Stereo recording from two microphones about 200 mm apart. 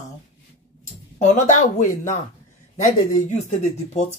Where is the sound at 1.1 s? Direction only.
40° left (ahead or behind).